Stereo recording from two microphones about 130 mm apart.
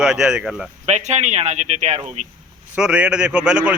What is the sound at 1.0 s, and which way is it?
Speech, 60° right (ahead or behind).